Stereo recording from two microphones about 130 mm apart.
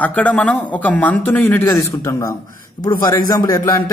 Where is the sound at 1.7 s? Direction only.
25° left (ahead or behind).